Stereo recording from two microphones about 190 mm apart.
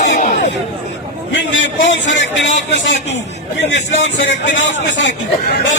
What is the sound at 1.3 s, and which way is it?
A man's voice, 70° left (ahead or behind).